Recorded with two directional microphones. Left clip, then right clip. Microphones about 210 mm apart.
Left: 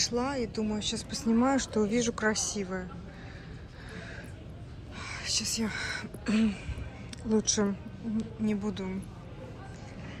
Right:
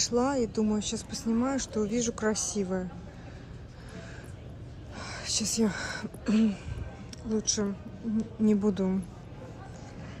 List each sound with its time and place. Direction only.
0.1 s speech: 20° right (ahead or behind)
4.9 s speech: 30° right (ahead or behind); by 6.6 s 15° right (ahead or behind)
7.2 s a woman's voice: 5° right (ahead or behind)
8.2 s speech: 30° right (ahead or behind)